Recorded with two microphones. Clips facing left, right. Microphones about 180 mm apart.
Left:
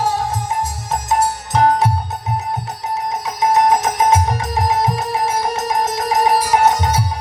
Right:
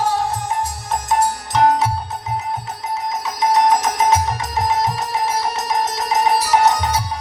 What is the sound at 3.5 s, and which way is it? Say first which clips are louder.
Music: left 1 dB; 50° left (ahead or behind).